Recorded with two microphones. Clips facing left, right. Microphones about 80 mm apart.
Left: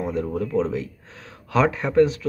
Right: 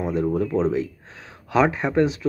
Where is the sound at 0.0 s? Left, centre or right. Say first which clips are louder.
Right 3 dB; centre.